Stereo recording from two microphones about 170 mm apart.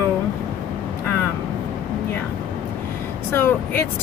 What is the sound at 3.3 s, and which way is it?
Speech, 10° left (ahead or behind).